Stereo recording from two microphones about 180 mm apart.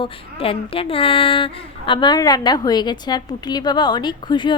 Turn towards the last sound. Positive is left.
turn(degrees=25)  # may be behind; listen again after turning